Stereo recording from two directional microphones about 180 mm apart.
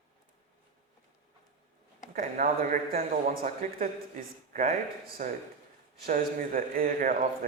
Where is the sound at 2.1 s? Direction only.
50° right (ahead or behind).